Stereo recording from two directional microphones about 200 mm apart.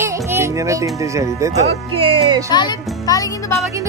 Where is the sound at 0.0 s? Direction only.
15° right (ahead or behind).